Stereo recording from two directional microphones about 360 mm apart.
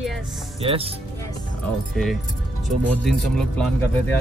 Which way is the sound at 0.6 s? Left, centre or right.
Centre.